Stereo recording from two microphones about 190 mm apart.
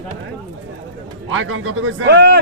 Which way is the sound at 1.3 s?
90° right.